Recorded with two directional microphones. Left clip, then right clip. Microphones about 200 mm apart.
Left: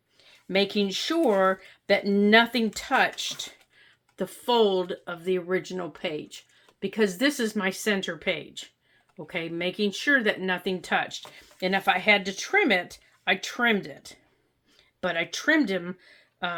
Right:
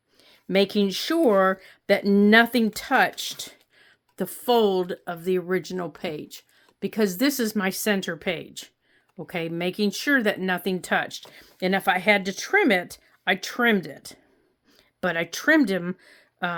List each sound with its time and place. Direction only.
0.2 s speech: 50° right (ahead or behind)